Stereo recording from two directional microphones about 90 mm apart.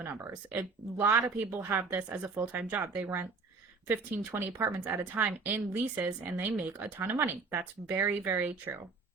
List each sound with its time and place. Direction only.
0.9 s speech: 25° right (ahead or behind)
5.1 s speech: 20° right (ahead or behind)